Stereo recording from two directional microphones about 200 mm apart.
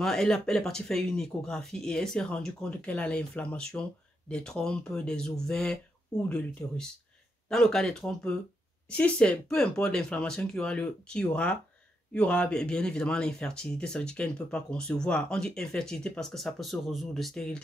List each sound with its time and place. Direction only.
0.0 s speech: centre (ahead or behind)